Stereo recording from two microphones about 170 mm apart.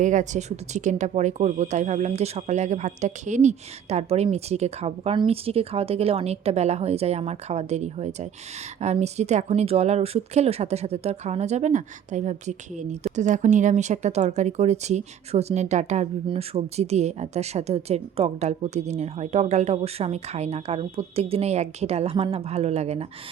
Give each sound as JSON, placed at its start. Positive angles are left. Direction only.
{"t": 0.0, "sound": "speech", "side_deg": -45}